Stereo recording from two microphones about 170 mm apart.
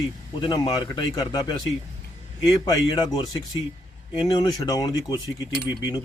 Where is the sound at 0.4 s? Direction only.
25° left (ahead or behind).